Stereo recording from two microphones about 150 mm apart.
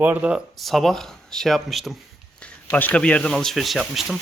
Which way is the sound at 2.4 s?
10° left (ahead or behind).